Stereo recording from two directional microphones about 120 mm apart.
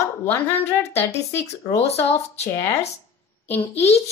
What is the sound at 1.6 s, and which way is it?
Speech, 30° left (ahead or behind).